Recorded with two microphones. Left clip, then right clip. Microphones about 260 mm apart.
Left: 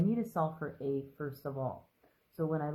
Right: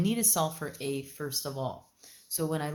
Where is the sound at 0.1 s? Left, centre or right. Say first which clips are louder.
Right 4 dB; right.